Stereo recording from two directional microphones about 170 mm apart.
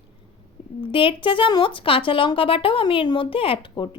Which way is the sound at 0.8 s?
30° left (ahead or behind).